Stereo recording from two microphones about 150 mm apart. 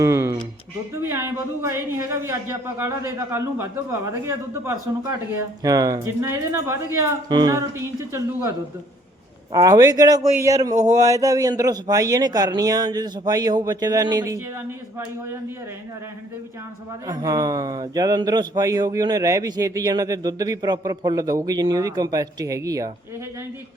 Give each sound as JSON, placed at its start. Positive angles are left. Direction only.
{"t": 0.0, "sound": "a sound", "side_deg": -20}
{"t": 1.1, "sound": "a man's voice", "side_deg": -15}
{"t": 17.1, "sound": "speech", "side_deg": -25}